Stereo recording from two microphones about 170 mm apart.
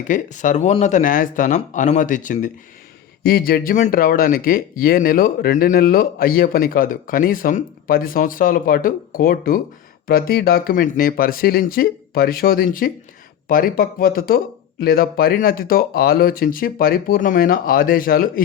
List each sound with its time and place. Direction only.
0.1 s speech: 45° left (ahead or behind)
3.2 s speech: 65° left (ahead or behind)